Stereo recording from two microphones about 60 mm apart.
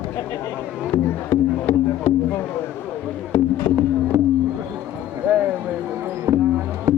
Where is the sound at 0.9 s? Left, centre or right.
Left.